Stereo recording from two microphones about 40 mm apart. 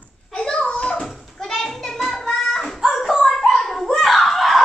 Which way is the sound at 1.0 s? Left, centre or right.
Centre.